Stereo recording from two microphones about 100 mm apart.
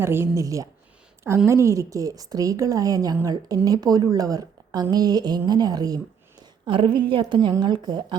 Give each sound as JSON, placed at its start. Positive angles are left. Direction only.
{"t": 0.0, "sound": "a woman's voice", "side_deg": -25}
{"t": 6.4, "sound": "a woman's voice", "side_deg": -55}